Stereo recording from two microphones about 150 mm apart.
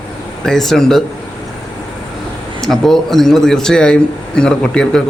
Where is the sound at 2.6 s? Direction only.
Centre (ahead or behind).